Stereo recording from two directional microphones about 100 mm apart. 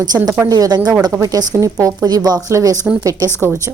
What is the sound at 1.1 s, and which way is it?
A woman's voice, 35° right (ahead or behind).